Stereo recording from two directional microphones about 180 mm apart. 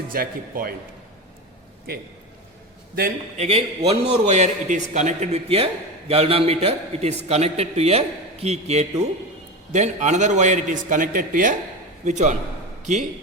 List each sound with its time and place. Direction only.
0.1 s a man's voice: 55° right (ahead or behind)
3.3 s a man's voice: 35° right (ahead or behind)